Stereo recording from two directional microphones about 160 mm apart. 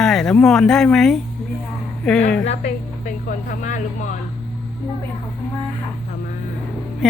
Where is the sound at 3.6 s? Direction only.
55° left (ahead or behind).